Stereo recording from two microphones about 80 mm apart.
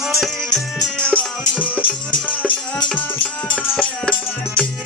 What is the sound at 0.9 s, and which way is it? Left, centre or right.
Music, centre.